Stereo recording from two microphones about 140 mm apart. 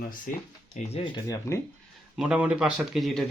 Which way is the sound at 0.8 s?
60° left (ahead or behind).